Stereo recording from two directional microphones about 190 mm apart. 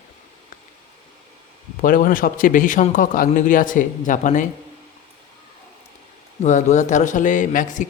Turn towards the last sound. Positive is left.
turn(degrees=40)  # may be behind; listen again after turning